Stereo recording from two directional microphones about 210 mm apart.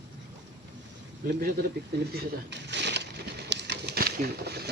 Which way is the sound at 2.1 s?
50° right (ahead or behind).